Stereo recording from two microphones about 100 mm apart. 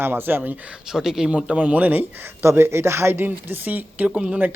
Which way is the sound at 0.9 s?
5° right (ahead or behind).